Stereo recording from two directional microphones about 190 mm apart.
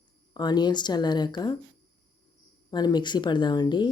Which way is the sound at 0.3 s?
20° left (ahead or behind).